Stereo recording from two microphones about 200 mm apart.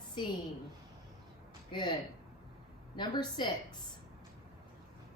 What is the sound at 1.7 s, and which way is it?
A woman's voice, 20° left (ahead or behind).